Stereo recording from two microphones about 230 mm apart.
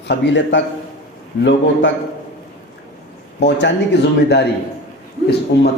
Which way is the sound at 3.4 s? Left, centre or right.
Left.